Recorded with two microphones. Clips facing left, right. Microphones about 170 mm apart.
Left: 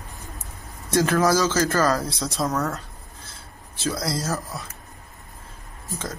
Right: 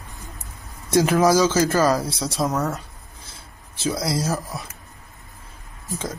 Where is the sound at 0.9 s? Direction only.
15° right (ahead or behind).